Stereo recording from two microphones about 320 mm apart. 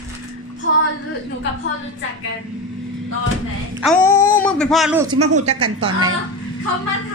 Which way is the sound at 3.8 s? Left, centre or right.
Centre.